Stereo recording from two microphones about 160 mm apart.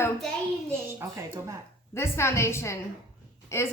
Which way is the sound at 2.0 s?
15° left (ahead or behind).